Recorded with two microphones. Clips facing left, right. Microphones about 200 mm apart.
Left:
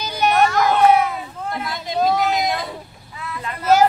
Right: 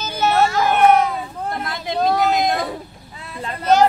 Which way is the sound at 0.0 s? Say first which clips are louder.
Even; 15° left (ahead or behind).